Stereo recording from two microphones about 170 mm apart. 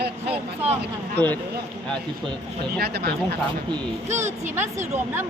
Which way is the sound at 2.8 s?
70° right (ahead or behind).